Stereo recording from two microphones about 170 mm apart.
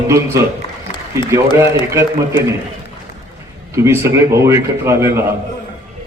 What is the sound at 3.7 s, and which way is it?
A man's voice, 15° right (ahead or behind).